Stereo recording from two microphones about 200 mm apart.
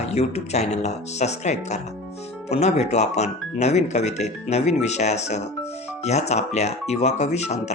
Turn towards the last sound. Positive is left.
turn(degrees=35)  # may be behind; listen again after turning